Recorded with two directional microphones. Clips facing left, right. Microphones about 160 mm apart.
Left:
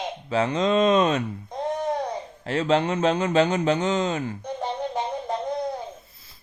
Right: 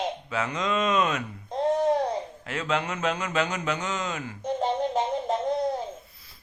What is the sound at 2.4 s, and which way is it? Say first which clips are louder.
Speech: left 9 dB; 30° left (ahead or behind).